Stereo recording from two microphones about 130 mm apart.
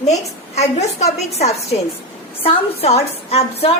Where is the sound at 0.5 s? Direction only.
55° left (ahead or behind).